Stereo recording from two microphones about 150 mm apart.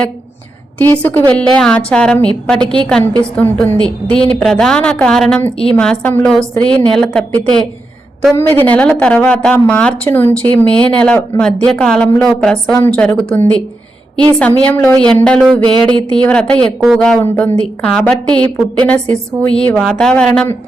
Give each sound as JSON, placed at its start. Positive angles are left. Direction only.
{"t": 0.8, "sound": "a woman's voice", "side_deg": 15}
{"t": 15.6, "sound": "a sound", "side_deg": -30}
{"t": 16.1, "sound": "a woman's voice", "side_deg": 5}